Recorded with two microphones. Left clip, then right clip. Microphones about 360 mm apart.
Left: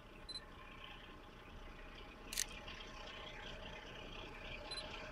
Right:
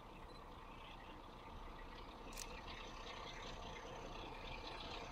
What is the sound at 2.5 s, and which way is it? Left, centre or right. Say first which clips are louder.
Vehicle: left 1 dB; centre.